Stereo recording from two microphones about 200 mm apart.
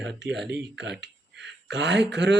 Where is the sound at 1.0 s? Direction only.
60° right (ahead or behind).